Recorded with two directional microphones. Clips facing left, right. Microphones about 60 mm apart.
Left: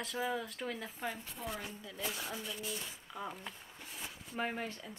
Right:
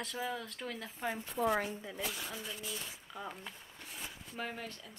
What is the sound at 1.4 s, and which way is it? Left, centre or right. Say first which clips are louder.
Speech: right 11 dB; right.